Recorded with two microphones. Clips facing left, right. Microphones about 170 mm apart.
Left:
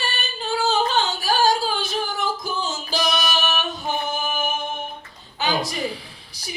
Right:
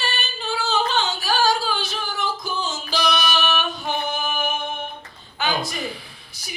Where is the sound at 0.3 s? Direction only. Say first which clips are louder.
Left 3 dB; 45° left (ahead or behind).